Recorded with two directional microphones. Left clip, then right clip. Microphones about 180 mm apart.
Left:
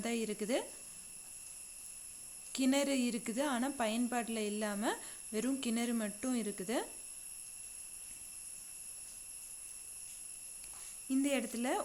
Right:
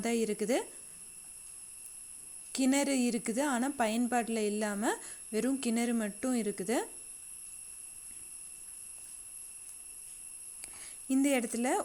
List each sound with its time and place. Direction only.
0.0 s a woman's voice: 25° right (ahead or behind)
2.5 s a woman's voice: 25° right (ahead or behind)
11.1 s a woman's voice: 30° right (ahead or behind)